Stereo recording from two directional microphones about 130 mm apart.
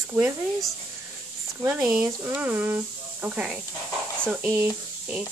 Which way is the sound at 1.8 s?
5° right (ahead or behind).